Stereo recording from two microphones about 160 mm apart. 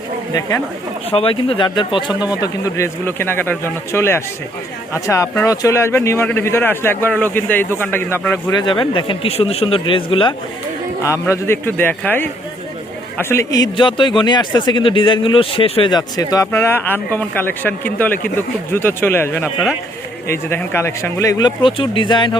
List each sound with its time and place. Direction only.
1.1 s speech: 35° left (ahead or behind)
2.4 s a man's voice: 20° left (ahead or behind)
8.5 s speech: 30° left (ahead or behind)
11.0 s a man's voice: 20° left (ahead or behind)